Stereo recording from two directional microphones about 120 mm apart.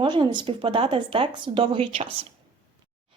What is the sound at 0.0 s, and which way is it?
Speech, 40° right (ahead or behind).